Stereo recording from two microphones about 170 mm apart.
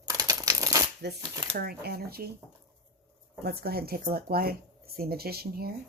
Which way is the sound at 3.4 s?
65° right (ahead or behind).